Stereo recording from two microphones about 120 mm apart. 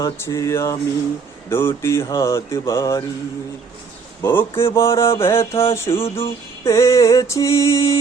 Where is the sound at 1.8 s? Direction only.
25° left (ahead or behind).